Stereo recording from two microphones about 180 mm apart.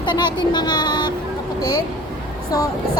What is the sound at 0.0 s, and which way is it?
Speech, 25° left (ahead or behind).